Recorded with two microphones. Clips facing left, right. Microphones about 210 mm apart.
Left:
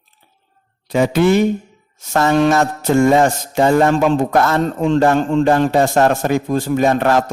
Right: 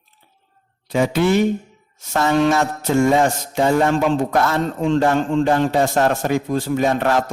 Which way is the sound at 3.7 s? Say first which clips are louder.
Left 3 dB; 45° left (ahead or behind).